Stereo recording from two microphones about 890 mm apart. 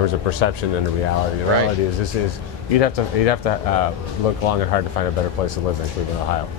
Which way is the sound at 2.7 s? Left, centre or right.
Left.